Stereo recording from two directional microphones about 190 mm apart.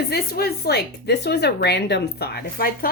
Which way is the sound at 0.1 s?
55° left (ahead or behind).